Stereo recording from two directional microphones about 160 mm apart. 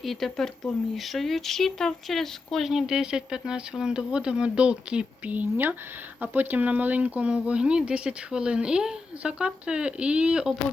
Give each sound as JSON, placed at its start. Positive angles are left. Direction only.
{"t": 0.0, "sound": "speech", "side_deg": 0}